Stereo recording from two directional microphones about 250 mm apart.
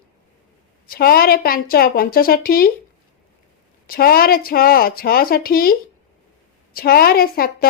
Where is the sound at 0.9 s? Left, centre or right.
Left.